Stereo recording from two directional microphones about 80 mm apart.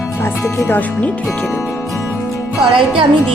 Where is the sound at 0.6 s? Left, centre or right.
Left.